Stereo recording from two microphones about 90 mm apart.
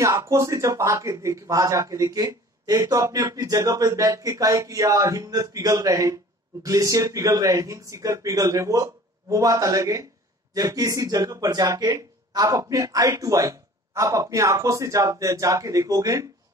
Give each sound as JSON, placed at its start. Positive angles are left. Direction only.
{"t": 0.2, "sound": "a man's voice", "side_deg": -35}